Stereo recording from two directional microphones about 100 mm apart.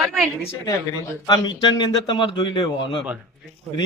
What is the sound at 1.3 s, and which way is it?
A man's voice, 50° left (ahead or behind).